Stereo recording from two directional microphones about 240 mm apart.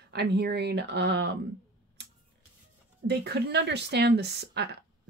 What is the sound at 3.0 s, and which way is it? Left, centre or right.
Speech, right.